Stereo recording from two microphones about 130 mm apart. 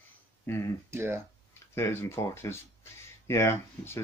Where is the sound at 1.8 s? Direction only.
20° left (ahead or behind).